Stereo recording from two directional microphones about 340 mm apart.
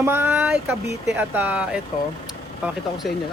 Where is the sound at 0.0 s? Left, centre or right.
Centre.